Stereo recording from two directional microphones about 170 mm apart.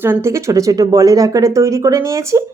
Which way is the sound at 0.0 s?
15° right (ahead or behind).